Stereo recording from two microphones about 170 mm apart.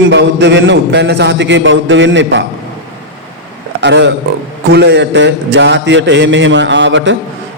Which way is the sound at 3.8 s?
90° right.